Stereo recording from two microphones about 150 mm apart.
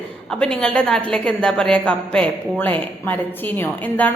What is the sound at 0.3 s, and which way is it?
A woman's voice, 5° left (ahead or behind).